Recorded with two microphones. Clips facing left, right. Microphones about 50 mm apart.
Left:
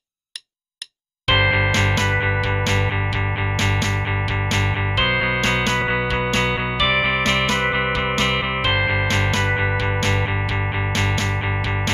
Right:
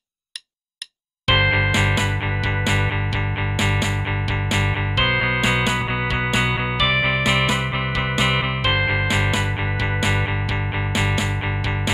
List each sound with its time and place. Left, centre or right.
1.2 s music: centre
1.7 s music: centre
7.2 s music: centre
8.5 s music: centre